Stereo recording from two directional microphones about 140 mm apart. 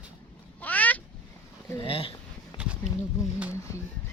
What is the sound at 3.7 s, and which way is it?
Speech, 20° left (ahead or behind).